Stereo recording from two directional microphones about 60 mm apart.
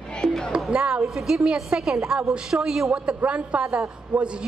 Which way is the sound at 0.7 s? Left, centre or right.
Centre.